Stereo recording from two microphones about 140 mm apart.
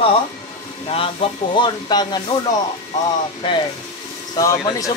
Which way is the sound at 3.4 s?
35° left (ahead or behind).